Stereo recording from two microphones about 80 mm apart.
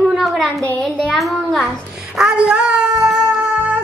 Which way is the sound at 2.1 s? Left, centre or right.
Centre.